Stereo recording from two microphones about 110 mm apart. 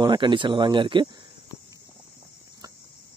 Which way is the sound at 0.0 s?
45° right (ahead or behind).